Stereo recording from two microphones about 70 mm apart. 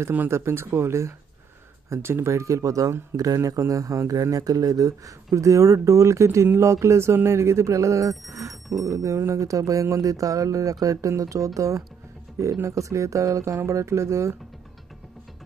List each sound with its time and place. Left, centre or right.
0.3 s speech: right